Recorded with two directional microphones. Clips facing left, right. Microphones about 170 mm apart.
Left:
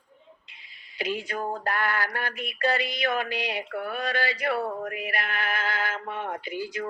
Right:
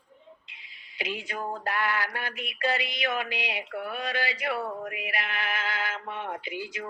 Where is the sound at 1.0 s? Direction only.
40° left (ahead or behind).